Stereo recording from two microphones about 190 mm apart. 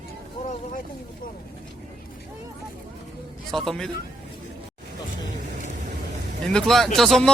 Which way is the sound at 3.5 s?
Centre (ahead or behind).